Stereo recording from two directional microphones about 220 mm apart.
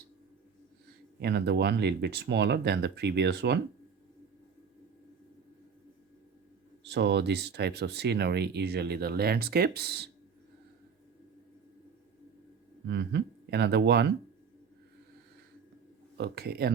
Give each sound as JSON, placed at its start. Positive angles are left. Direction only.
{"t": 1.2, "sound": "speech", "side_deg": -50}
{"t": 6.8, "sound": "speech", "side_deg": -50}
{"t": 12.9, "sound": "speech", "side_deg": -50}
{"t": 16.1, "sound": "speech", "side_deg": -50}